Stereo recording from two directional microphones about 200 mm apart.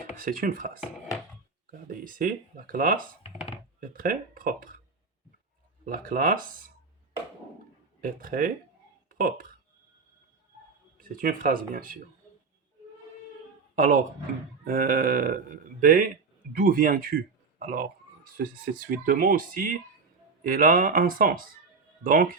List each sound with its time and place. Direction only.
0.2 s speech: 45° right (ahead or behind)
1.9 s speech: 45° right (ahead or behind)
5.8 s speech: 45° right (ahead or behind)
8.0 s speech: 45° right (ahead or behind)
9.0 s a sound: 45° right (ahead or behind)
11.0 s speech: 45° right (ahead or behind)
13.7 s speech: 45° right (ahead or behind)